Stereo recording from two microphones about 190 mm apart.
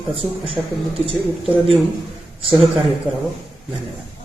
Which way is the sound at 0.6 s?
10° right (ahead or behind).